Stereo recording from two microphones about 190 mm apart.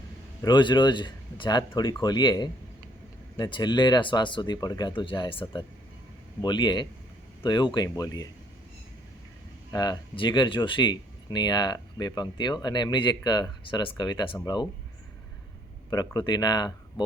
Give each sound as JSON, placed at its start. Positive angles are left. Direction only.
{"t": 0.4, "sound": "speech", "side_deg": 25}
{"t": 9.7, "sound": "speech", "side_deg": 20}
{"t": 15.9, "sound": "speech", "side_deg": 20}